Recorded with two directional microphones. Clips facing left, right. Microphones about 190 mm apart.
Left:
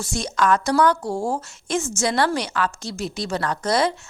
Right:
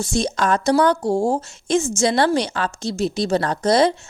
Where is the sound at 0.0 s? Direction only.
25° right (ahead or behind).